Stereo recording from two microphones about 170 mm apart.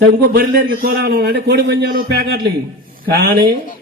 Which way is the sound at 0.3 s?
60° right (ahead or behind).